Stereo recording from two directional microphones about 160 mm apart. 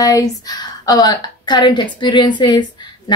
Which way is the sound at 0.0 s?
20° left (ahead or behind).